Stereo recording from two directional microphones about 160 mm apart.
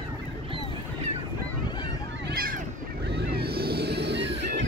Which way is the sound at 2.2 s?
70° right (ahead or behind).